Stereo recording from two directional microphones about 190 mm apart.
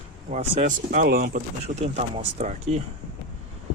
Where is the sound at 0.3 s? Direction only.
40° right (ahead or behind).